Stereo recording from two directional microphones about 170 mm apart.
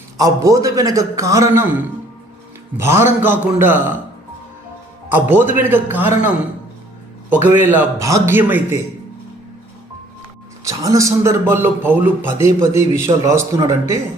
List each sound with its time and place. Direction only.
0.2 s a man's voice: 20° right (ahead or behind)
5.0 s a man's voice: 10° right (ahead or behind)
10.6 s a man's voice: 20° right (ahead or behind)